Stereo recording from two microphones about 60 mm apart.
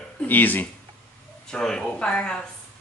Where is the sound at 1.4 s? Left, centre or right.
Centre.